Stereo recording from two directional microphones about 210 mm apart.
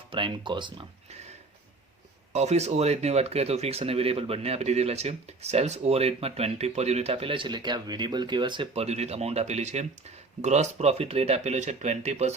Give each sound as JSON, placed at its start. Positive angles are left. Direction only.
{"t": 0.1, "sound": "speech", "side_deg": -25}
{"t": 2.3, "sound": "speech", "side_deg": -30}